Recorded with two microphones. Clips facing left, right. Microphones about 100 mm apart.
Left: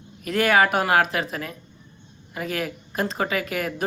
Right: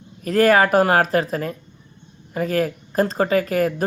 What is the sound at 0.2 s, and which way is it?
Speech, 40° right (ahead or behind).